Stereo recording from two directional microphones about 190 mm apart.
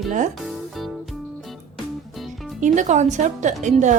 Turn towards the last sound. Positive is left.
turn(degrees=-40)  # may be behind; listen again after turning